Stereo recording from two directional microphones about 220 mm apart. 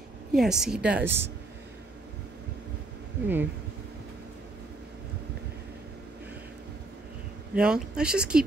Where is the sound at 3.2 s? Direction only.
10° right (ahead or behind).